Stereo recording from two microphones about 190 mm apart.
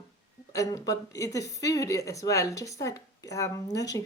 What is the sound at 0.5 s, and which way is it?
A woman's voice, 20° left (ahead or behind).